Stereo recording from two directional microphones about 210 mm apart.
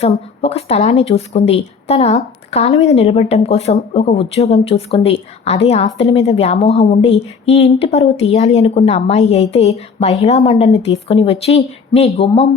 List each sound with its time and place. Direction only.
0.4 s a woman's voice: 30° left (ahead or behind)
10.5 s speech: 20° left (ahead or behind)
10.8 s a woman's voice: 30° left (ahead or behind)